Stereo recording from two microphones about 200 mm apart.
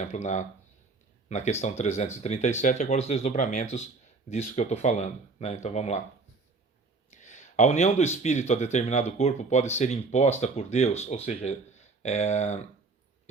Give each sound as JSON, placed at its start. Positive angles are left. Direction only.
{"t": 0.1, "sound": "speech", "side_deg": 35}
{"t": 7.1, "sound": "speech", "side_deg": 35}